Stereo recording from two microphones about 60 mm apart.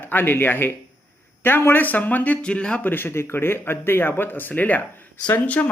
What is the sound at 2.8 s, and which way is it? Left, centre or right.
Speech, left.